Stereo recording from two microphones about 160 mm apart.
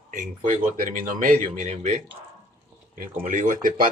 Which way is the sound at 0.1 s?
55° right (ahead or behind).